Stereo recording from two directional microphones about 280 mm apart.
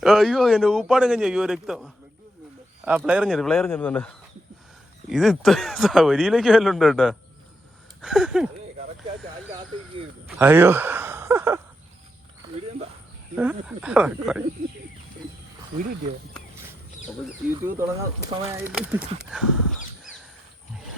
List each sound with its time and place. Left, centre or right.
0.0 s speech: centre
9.5 s speech: centre
10.2 s speech: centre
13.3 s speech: centre
17.6 s speech: centre